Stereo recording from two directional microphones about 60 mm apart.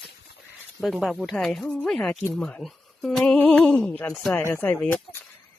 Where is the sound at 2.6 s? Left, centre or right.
Centre.